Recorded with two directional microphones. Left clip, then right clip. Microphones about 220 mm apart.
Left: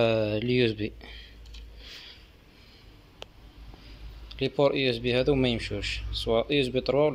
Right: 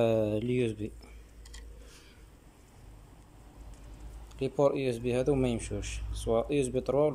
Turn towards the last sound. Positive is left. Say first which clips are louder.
# left 4 dB
turn(degrees=-5)  # may be behind; listen again after turning